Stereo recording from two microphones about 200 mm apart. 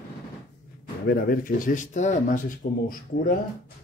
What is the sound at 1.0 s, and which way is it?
Speech, 50° left (ahead or behind).